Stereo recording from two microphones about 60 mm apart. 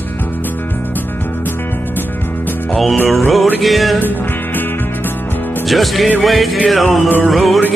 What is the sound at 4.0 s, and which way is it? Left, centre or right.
Music, left.